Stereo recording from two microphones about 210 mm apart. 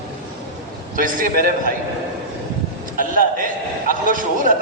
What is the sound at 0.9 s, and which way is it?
Speech, 40° right (ahead or behind).